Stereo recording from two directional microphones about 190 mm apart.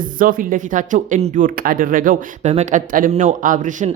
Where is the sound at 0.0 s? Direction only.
45° right (ahead or behind).